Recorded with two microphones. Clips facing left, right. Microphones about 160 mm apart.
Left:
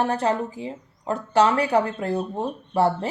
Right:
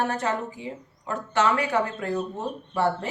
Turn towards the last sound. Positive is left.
turn(degrees=35)  # may be behind; listen again after turning